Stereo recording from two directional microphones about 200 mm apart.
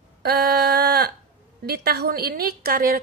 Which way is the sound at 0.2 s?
55° right (ahead or behind).